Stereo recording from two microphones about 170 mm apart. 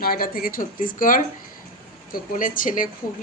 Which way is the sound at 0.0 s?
60° left (ahead or behind).